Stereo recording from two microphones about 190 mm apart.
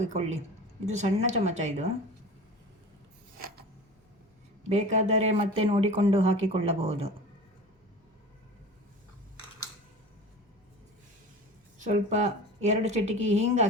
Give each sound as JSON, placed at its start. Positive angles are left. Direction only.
{"t": 0.0, "sound": "speech", "side_deg": -35}
{"t": 3.3, "sound": "a sound", "side_deg": -50}
{"t": 4.7, "sound": "speech", "side_deg": -35}
{"t": 11.8, "sound": "speech", "side_deg": -40}